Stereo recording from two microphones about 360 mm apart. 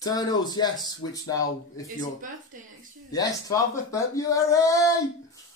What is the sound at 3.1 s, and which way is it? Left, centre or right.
Speech, centre.